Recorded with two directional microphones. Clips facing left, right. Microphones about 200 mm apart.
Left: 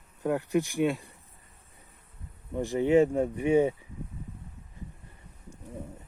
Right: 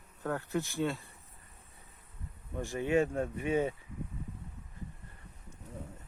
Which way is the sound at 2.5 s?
20° left (ahead or behind).